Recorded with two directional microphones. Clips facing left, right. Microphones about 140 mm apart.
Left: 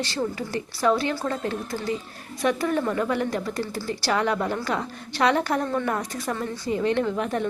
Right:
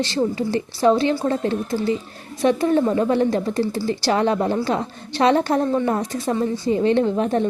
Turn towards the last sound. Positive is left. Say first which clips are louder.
# right 6 dB
turn(degrees=-30)  # may be behind; listen again after turning